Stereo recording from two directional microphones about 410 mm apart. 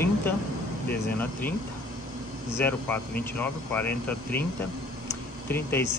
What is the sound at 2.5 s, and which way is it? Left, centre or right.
Speech, centre.